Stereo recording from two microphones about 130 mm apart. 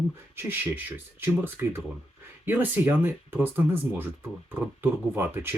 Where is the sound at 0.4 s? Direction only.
15° right (ahead or behind).